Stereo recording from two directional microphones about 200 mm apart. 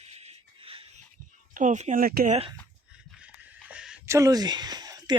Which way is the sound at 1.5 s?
40° right (ahead or behind).